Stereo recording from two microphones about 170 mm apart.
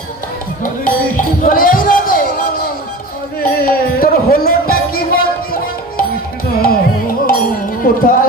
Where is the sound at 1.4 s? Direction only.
55° left (ahead or behind).